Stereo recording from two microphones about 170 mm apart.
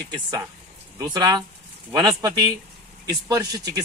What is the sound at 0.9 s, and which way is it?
Speech, 25° right (ahead or behind).